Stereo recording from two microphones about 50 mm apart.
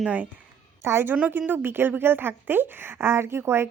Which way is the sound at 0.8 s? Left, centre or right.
Right.